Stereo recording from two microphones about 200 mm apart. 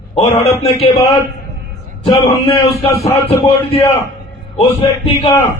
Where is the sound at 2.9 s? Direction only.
15° left (ahead or behind).